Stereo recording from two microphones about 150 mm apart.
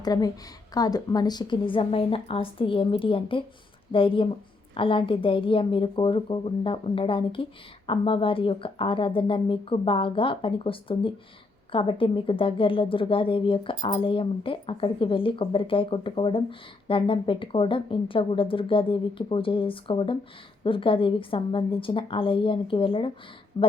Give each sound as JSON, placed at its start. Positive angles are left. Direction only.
{"t": 0.0, "sound": "a woman's voice", "side_deg": 25}